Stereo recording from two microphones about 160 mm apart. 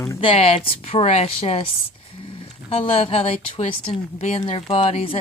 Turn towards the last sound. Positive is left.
turn(degrees=35)  # may be behind; listen again after turning